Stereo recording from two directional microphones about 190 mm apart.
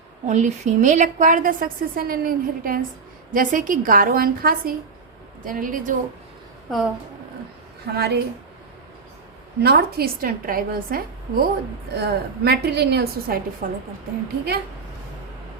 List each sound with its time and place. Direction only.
0.3 s a woman's voice: 40° right (ahead or behind)
7.9 s a woman's voice: 60° right (ahead or behind)
9.6 s a woman's voice: 55° right (ahead or behind)